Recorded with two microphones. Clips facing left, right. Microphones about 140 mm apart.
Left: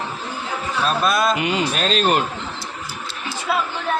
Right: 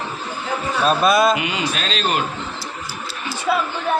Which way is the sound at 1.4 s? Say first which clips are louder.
Left 3 dB; 45° left (ahead or behind).